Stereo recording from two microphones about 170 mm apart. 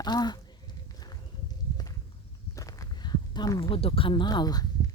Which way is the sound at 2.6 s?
20° left (ahead or behind).